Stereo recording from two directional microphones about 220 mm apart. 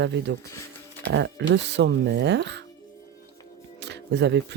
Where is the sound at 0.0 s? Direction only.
50° right (ahead or behind).